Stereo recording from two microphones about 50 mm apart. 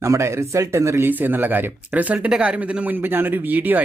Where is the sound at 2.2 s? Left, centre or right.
Centre.